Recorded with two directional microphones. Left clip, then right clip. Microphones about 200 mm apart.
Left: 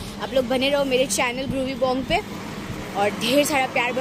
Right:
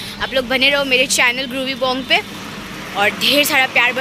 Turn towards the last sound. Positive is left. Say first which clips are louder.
# right 7 dB
turn(degrees=0)  # may be behind; listen again after turning